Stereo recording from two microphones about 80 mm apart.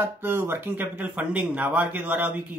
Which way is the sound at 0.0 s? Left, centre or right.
Right.